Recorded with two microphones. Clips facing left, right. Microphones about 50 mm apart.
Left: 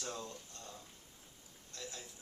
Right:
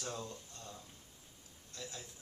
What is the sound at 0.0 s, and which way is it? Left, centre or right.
A man's voice, centre.